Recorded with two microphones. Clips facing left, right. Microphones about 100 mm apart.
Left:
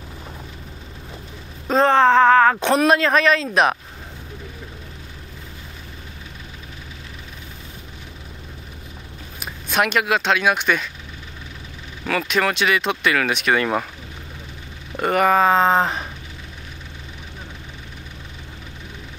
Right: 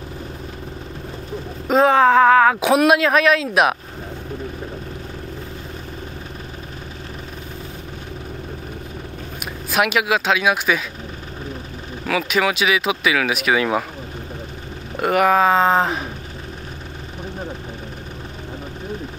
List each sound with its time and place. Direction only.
1.7 s speech: 5° right (ahead or behind)
9.4 s speech: 5° right (ahead or behind)
12.1 s speech: centre (ahead or behind)
15.0 s speech: 5° right (ahead or behind)